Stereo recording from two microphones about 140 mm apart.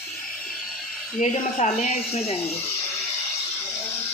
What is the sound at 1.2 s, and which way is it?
Speech, 55° left (ahead or behind).